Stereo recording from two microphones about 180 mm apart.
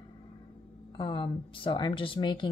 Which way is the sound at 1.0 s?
30° left (ahead or behind).